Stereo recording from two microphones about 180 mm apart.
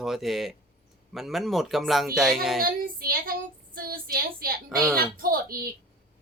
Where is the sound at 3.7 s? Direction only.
55° right (ahead or behind).